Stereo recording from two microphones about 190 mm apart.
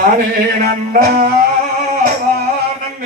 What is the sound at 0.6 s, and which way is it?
Music, 50° right (ahead or behind).